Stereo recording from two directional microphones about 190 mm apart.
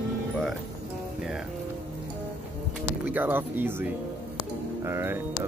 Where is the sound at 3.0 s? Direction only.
10° right (ahead or behind).